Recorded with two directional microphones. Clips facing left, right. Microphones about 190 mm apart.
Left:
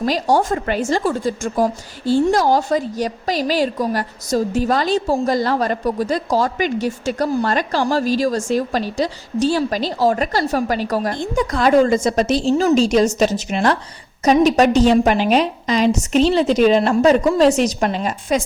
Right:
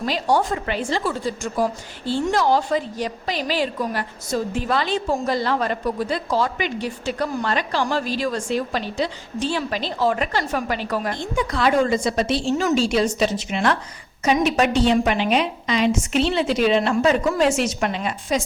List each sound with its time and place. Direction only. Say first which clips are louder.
0.0 s a woman's voice: left 4 dB; 40° left (ahead or behind)